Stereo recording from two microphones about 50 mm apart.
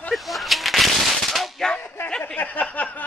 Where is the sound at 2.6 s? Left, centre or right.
Left.